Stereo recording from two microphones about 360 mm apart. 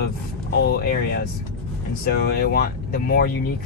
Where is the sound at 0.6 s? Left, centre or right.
Left.